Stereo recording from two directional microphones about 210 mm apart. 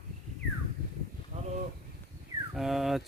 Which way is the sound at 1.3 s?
35° right (ahead or behind).